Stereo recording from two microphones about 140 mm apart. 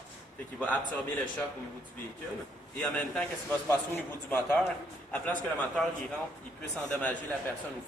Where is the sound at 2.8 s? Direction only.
10° left (ahead or behind).